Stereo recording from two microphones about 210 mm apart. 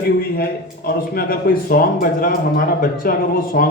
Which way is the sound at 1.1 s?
45° left (ahead or behind).